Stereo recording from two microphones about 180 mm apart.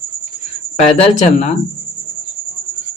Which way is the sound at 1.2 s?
40° left (ahead or behind).